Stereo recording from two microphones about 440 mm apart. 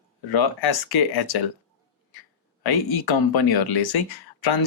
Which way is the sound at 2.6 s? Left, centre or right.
Left.